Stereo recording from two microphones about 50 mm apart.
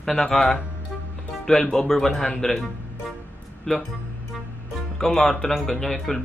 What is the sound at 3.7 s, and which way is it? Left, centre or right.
Speech, centre.